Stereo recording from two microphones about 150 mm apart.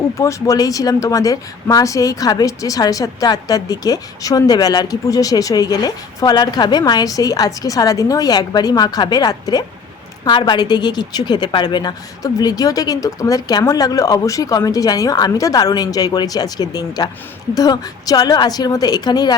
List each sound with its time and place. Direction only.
0.2 s speech: 20° left (ahead or behind)